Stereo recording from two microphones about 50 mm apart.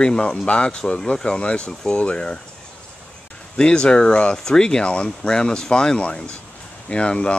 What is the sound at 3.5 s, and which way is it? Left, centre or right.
Speech, centre.